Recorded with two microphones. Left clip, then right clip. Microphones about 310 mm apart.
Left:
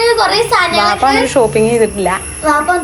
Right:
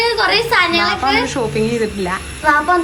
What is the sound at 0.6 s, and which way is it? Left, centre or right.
A child's voice, centre.